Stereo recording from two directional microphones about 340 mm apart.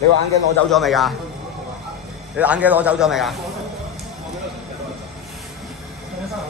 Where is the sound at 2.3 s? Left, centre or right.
Centre.